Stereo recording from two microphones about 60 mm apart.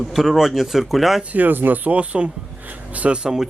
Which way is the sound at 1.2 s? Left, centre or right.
Right.